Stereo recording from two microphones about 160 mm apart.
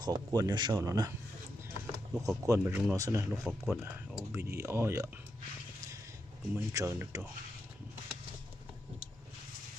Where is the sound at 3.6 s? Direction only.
5° right (ahead or behind).